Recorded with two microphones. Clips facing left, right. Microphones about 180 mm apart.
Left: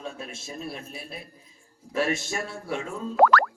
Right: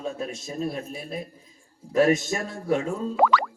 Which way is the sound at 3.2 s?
Centre (ahead or behind).